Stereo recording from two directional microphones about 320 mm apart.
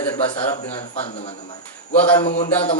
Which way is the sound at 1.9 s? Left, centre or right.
Centre.